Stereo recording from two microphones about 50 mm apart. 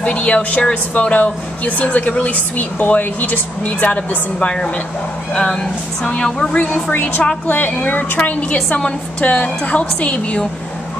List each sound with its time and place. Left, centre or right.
0.0 s speech: left
5.3 s speech: centre
6.5 s a woman's voice: left